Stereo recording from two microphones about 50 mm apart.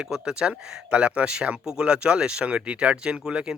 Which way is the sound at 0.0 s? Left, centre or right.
Centre.